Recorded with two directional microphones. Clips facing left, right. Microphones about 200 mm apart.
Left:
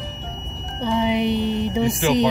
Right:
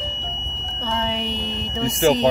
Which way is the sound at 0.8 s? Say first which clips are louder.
Left 6 dB; 15° left (ahead or behind).